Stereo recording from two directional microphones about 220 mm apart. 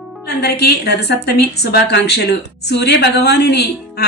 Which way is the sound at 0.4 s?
50° left (ahead or behind).